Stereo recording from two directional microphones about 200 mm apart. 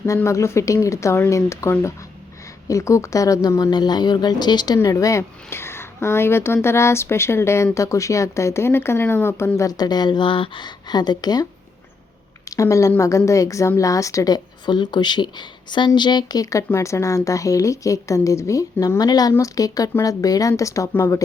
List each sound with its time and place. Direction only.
0.0 s speech: 15° left (ahead or behind)
12.5 s speech: 15° left (ahead or behind)